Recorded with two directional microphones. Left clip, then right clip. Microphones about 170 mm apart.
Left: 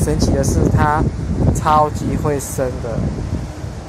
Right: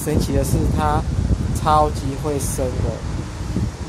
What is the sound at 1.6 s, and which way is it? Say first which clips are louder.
Speech: left 2 dB; 5° left (ahead or behind).